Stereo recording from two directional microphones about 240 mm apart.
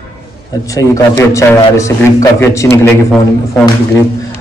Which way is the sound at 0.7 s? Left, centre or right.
Centre.